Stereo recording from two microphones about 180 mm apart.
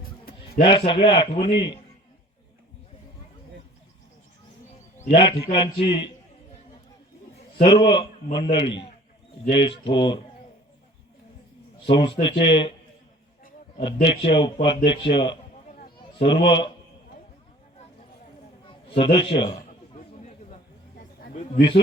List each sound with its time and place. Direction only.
0.0 s music: 55° left (ahead or behind)
0.6 s a man's voice: 30° left (ahead or behind)
5.0 s a man's voice: 30° left (ahead or behind)
7.6 s a man's voice: 30° left (ahead or behind)
11.9 s a man's voice: 25° left (ahead or behind)
13.7 s a man's voice: 30° left (ahead or behind)
18.7 s a man's voice: 30° left (ahead or behind)
20.1 s chatter: 40° left (ahead or behind)